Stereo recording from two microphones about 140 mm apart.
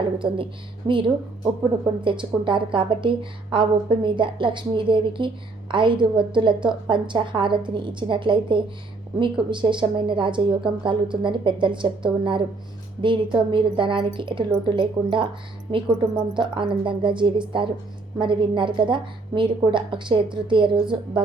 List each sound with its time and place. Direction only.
0.0 s a woman's voice: 35° right (ahead or behind)
16.3 s a woman's voice: 35° right (ahead or behind)